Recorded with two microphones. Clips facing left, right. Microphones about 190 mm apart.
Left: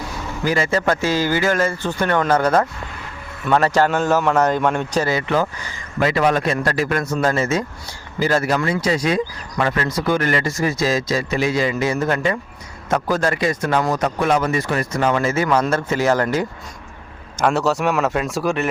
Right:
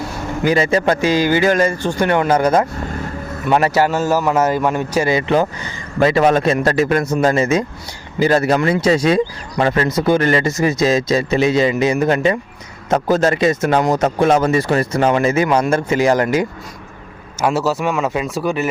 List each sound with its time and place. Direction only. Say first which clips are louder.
0.4 s a man's voice: right 4 dB; 20° right (ahead or behind)
2.7 s vehicle: right 9 dB; 45° right (ahead or behind)
3.6 s a man's voice: right 1 dB; 10° right (ahead or behind)
17.4 s speech: right 1 dB; 5° right (ahead or behind)